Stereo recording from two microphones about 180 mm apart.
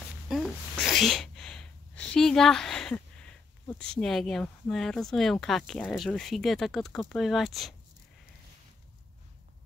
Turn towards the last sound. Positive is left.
turn(degrees=0)  # may be behind; listen again after turning